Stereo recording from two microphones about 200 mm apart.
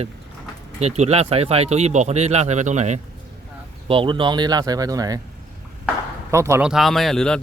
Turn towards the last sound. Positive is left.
turn(degrees=5)  # may be behind; listen again after turning